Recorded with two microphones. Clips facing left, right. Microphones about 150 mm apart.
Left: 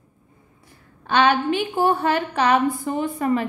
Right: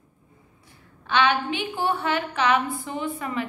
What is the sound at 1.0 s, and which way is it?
A woman's voice, 40° left (ahead or behind).